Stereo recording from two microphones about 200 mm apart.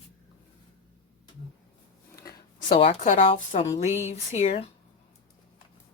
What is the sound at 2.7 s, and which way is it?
A woman's voice, 30° left (ahead or behind).